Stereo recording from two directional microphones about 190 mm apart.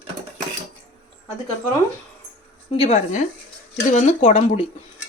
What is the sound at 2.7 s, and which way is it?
Speech, 35° left (ahead or behind).